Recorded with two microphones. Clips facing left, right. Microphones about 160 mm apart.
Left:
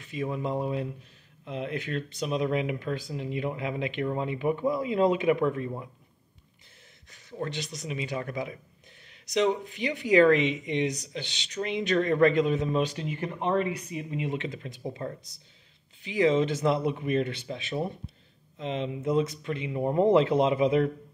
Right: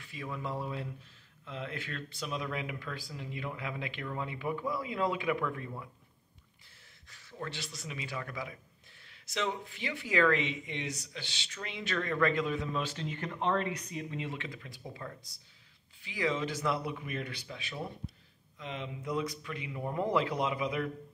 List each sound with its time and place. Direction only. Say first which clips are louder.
0.0 s speech: left 9 dB; 20° left (ahead or behind)
7.1 s speech: left 7 dB; 20° left (ahead or behind)